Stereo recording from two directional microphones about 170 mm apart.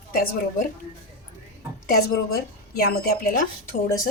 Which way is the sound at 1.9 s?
65° left (ahead or behind).